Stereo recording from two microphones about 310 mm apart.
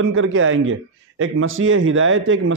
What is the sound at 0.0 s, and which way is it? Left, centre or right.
A man's voice, right.